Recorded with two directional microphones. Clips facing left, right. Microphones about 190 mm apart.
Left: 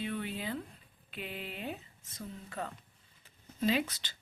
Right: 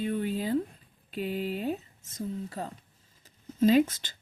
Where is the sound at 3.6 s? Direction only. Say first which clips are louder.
Right 9 dB; 45° right (ahead or behind).